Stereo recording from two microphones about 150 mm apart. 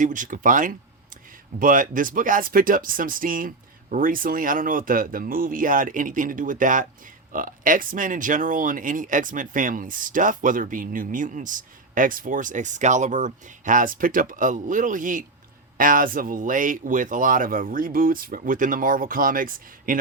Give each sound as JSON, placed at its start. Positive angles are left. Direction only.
{"t": 0.0, "sound": "speech", "side_deg": -60}